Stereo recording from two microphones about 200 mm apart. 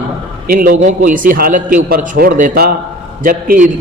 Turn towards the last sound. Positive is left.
turn(degrees=-40)  # may be behind; listen again after turning